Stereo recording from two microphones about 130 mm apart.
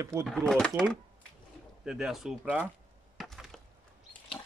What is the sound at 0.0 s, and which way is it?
Speech, 20° right (ahead or behind).